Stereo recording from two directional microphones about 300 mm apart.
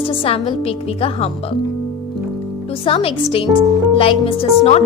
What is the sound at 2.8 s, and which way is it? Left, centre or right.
A woman's voice, centre.